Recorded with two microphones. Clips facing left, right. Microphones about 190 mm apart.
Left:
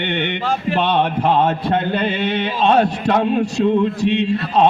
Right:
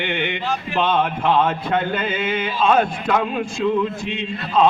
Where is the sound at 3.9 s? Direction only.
70° left (ahead or behind).